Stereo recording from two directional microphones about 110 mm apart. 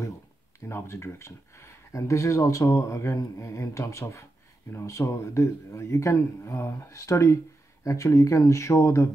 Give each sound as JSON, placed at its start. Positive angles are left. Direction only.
{"t": 0.7, "sound": "speech", "side_deg": 25}